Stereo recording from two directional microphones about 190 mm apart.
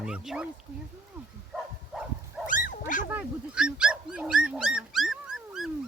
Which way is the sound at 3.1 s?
5° right (ahead or behind).